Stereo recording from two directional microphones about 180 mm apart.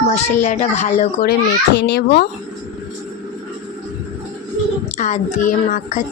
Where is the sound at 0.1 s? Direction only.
40° left (ahead or behind); by 2.2 s 65° left (ahead or behind).